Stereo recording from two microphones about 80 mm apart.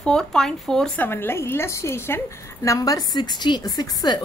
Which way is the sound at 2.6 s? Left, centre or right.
Left.